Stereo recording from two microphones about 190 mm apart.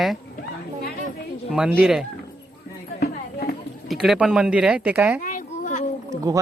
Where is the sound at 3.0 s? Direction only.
55° left (ahead or behind).